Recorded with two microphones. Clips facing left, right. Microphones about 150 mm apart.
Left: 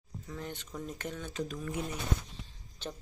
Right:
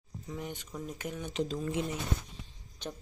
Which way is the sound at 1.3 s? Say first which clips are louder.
Right 6 dB; 25° right (ahead or behind).